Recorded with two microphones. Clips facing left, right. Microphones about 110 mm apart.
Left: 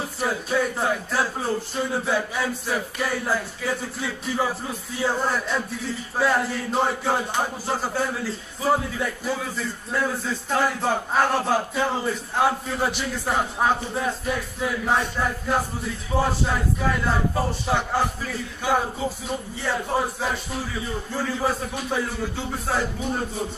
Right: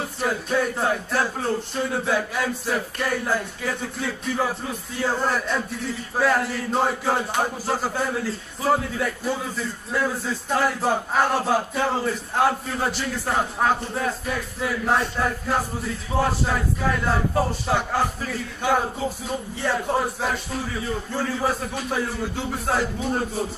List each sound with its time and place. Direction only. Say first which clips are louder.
0.2 s speech: even; centre (ahead or behind)